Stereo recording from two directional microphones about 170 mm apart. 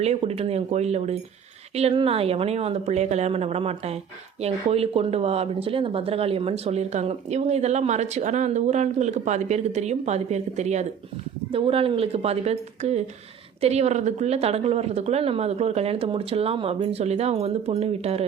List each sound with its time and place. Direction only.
0.0 s speech: 40° right (ahead or behind)